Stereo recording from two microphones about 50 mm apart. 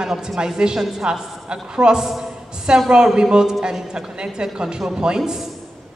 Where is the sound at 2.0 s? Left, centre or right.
Centre.